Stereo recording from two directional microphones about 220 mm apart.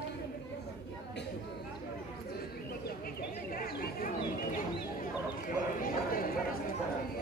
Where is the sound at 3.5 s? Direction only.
40° left (ahead or behind).